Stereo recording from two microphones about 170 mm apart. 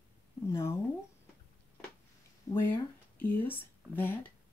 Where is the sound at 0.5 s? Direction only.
15° left (ahead or behind).